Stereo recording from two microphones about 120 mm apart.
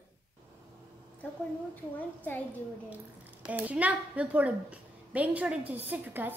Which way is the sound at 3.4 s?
15° right (ahead or behind).